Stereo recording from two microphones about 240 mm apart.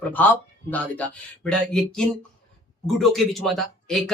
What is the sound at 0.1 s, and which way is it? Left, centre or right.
Speech, centre.